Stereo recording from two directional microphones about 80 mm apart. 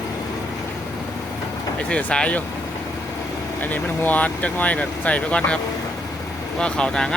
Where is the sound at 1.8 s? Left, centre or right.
Centre.